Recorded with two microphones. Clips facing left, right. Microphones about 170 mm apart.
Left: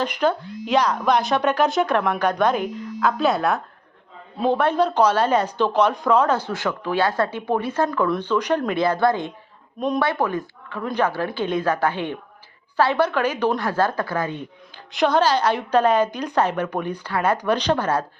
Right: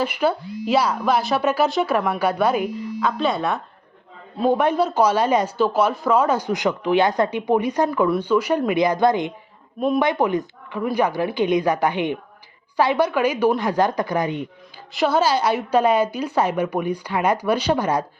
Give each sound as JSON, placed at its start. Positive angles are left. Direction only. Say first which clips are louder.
{"t": 0.0, "sound": "speech", "louder": "even", "side_deg": -10}
{"t": 4.4, "sound": "speech", "louder": "right 1 dB", "side_deg": -10}
{"t": 14.9, "sound": "speech", "louder": "even", "side_deg": -5}